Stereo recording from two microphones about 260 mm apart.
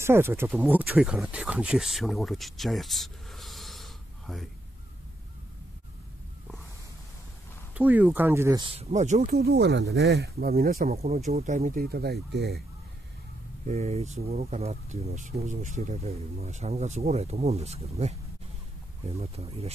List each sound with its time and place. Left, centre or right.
0.0 s speech: centre
7.7 s speech: centre
8.7 s speech: right
11.0 s speech: right
13.7 s speech: right